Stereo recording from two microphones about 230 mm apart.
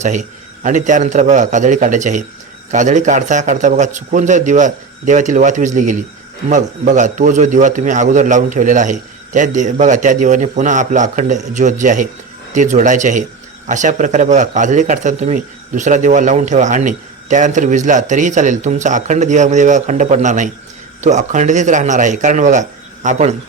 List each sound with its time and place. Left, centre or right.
0.0 s speech: right